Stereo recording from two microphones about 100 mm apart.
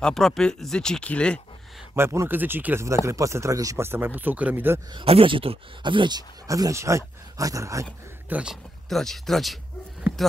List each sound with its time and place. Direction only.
0.0 s speech: 5° left (ahead or behind)
2.0 s speech: 25° right (ahead or behind)
5.0 s speech: 65° right (ahead or behind); by 7.8 s 35° right (ahead or behind)
8.3 s speech: 10° right (ahead or behind)
8.8 s speech: 5° left (ahead or behind)